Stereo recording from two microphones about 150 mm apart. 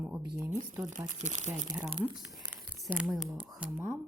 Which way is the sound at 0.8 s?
55° right (ahead or behind).